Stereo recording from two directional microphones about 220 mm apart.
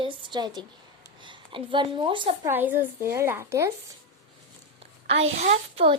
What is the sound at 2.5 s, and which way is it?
A woman's voice, 10° right (ahead or behind).